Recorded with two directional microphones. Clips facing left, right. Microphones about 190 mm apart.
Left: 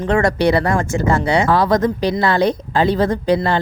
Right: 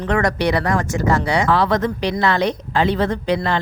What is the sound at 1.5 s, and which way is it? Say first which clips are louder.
A woman's voice: left 3 dB; 40° left (ahead or behind).